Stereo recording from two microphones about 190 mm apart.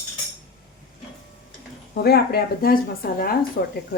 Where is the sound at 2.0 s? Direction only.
55° left (ahead or behind).